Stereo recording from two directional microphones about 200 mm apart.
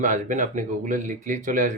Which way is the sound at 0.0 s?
40° right (ahead or behind).